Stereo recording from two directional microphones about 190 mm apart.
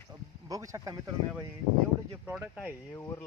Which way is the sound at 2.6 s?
15° left (ahead or behind).